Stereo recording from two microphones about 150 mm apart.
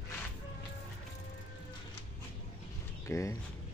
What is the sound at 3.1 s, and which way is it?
Speech, 20° left (ahead or behind).